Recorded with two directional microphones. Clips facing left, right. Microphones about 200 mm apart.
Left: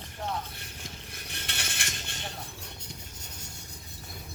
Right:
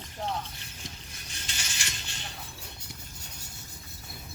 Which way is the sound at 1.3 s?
60° left (ahead or behind).